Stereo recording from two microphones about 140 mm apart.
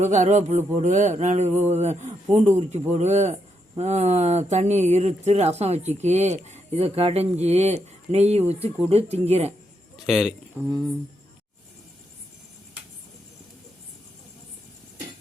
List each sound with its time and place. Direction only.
0.0 s a sound: 55° right (ahead or behind)
2.5 s speech: 55° right (ahead or behind)
10.1 s speech: 5° right (ahead or behind)